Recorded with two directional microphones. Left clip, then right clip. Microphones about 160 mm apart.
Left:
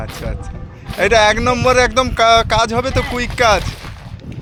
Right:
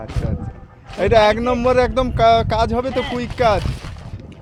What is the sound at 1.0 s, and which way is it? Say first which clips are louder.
Speech: left 2 dB; 10° right (ahead or behind).